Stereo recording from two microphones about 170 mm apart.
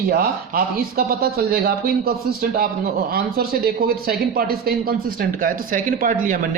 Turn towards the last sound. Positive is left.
turn(degrees=-50)  # may be behind; listen again after turning